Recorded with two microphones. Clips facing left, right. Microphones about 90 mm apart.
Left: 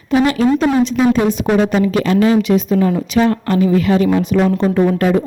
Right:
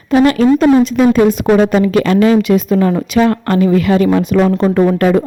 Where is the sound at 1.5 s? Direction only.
65° right (ahead or behind).